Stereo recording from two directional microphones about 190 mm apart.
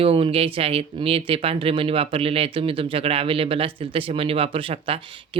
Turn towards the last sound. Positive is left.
turn(degrees=-25)  # may be behind; listen again after turning